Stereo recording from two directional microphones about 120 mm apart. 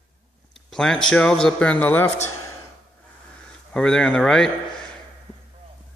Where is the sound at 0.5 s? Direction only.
5° left (ahead or behind).